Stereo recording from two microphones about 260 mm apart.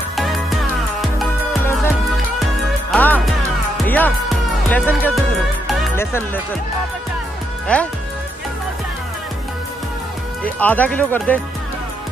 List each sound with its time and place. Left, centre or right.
0.1 s music: centre
7.6 s speech: centre
10.4 s speech: centre